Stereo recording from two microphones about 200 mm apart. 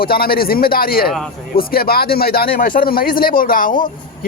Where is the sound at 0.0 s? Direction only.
50° left (ahead or behind).